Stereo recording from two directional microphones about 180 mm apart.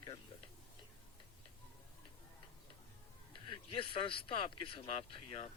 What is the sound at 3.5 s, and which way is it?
Speech, 30° left (ahead or behind).